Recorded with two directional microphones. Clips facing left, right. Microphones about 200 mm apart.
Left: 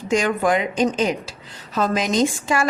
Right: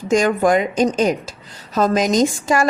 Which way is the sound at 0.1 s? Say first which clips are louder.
Right 4 dB; 45° right (ahead or behind).